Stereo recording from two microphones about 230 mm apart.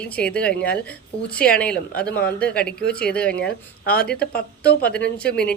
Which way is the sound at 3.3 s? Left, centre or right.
Left.